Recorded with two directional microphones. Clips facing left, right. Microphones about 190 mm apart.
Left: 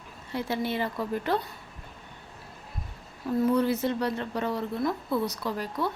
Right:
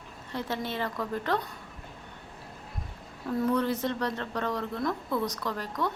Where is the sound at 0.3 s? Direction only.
10° left (ahead or behind).